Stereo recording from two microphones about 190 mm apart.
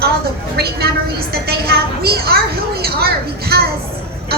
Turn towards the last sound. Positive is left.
turn(degrees=-55)  # may be behind; listen again after turning